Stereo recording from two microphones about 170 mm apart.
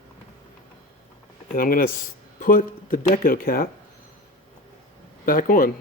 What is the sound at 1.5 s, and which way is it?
A man's voice, 55° left (ahead or behind).